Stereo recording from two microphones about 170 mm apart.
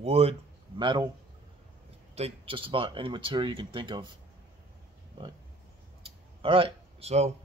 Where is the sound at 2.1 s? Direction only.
35° right (ahead or behind).